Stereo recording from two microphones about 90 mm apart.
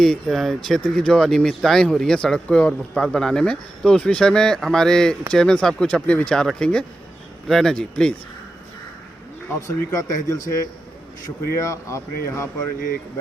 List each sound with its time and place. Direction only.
0.0 s speech: 5° left (ahead or behind)
9.6 s speech: 35° left (ahead or behind)
11.6 s speech: 35° left (ahead or behind)